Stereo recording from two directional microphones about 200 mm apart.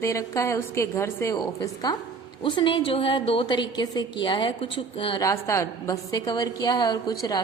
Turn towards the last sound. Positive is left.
turn(degrees=20)  # may be behind; listen again after turning